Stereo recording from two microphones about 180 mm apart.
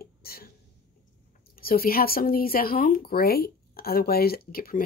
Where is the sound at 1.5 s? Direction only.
55° left (ahead or behind).